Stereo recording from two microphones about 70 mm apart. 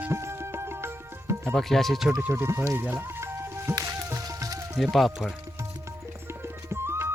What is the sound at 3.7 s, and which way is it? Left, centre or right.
Music, right.